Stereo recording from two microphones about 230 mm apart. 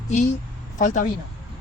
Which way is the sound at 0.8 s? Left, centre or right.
Left.